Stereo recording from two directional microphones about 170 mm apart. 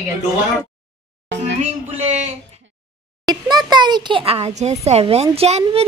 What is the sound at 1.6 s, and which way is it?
Music, 40° right (ahead or behind).